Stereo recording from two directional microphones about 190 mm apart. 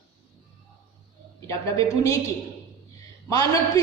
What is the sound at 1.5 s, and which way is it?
Speech, 15° left (ahead or behind).